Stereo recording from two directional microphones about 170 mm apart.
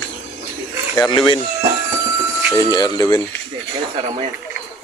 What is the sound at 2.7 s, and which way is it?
Speech, 25° left (ahead or behind).